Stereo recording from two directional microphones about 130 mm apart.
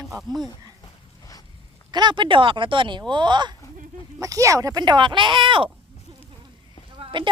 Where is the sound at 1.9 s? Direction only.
35° right (ahead or behind).